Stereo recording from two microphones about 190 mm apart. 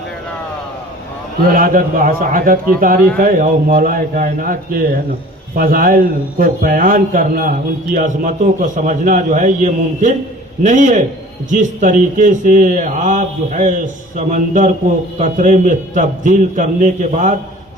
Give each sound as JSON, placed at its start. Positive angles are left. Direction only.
{"t": 1.5, "sound": "a man's voice", "side_deg": -45}